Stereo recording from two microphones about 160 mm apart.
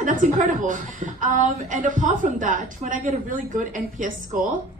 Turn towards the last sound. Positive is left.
turn(degrees=-55)  # may be behind; listen again after turning